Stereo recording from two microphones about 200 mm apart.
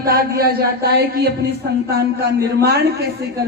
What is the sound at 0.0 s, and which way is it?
Speech, 50° right (ahead or behind).